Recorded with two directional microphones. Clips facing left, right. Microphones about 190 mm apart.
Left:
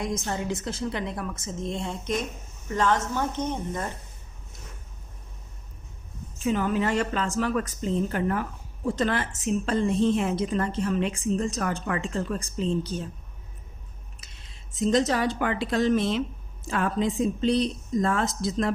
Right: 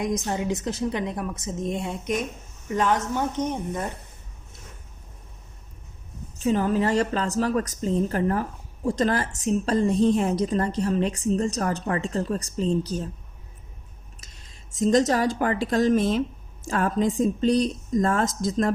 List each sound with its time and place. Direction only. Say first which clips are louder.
0.0 s a woman's voice: right 3 dB; 15° right (ahead or behind)
6.4 s a woman's voice: right 3 dB; 35° right (ahead or behind)
14.2 s speech: right 1 dB; 40° right (ahead or behind)